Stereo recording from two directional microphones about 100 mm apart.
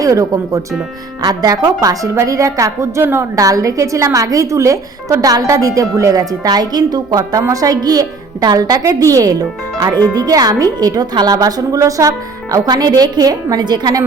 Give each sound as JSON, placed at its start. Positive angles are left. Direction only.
{"t": 0.0, "sound": "a woman's voice", "side_deg": -35}
{"t": 3.3, "sound": "a woman's voice", "side_deg": -35}